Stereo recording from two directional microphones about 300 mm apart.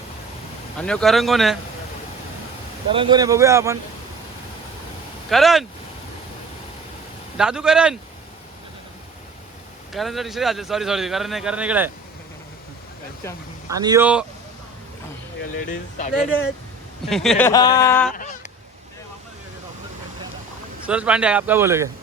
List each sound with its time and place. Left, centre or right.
0.8 s a man's voice: centre
2.9 s speech: centre
5.3 s a man's voice: centre
7.3 s a man's voice: centre
9.9 s a man's voice: centre
13.7 s speech: centre
15.7 s speech: left
17.1 s speech: centre
18.1 s honk: left
20.8 s a man's voice: centre